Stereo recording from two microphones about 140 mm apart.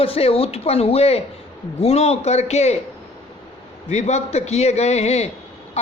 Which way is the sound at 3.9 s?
55° left (ahead or behind).